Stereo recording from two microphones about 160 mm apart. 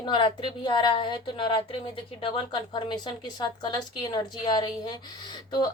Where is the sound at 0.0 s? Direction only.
30° left (ahead or behind).